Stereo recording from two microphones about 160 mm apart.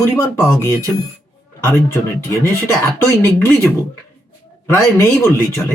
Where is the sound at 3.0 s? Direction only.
15° left (ahead or behind).